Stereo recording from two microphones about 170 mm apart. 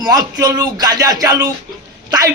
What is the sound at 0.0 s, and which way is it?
Speech, 20° right (ahead or behind).